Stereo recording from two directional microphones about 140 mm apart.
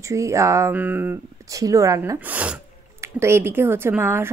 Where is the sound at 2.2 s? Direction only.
10° right (ahead or behind).